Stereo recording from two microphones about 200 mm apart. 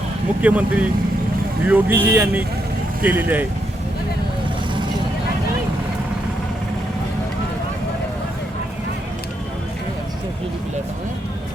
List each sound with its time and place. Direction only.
0.4 s speech: 5° right (ahead or behind)